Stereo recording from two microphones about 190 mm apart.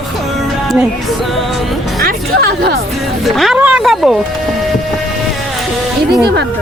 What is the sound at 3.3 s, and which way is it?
Speech, centre (ahead or behind).